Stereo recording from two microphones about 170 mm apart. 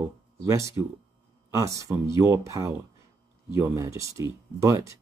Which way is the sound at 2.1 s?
15° right (ahead or behind).